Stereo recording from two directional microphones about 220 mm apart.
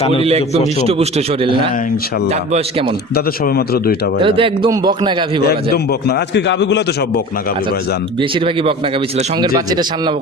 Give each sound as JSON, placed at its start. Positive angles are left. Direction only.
{"t": 0.2, "sound": "speech", "side_deg": -25}
{"t": 3.2, "sound": "a man's voice", "side_deg": 45}
{"t": 4.2, "sound": "speech", "side_deg": -25}
{"t": 5.7, "sound": "a man's voice", "side_deg": 45}
{"t": 8.2, "sound": "speech", "side_deg": -25}